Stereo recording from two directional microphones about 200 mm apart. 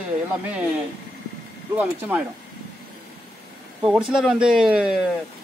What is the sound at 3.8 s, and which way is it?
Speech, 5° right (ahead or behind).